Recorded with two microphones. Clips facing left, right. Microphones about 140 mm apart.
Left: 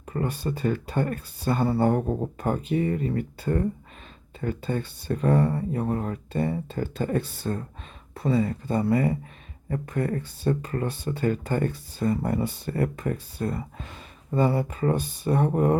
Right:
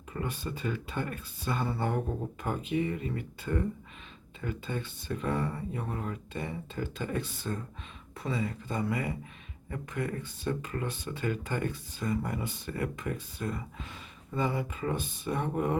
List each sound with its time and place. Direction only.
0.1 s speech: 40° left (ahead or behind)